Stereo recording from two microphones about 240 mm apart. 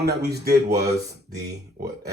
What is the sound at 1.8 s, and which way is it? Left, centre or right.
Speech, right.